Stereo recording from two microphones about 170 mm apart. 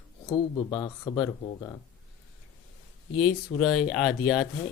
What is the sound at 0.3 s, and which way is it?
Speech, 25° left (ahead or behind).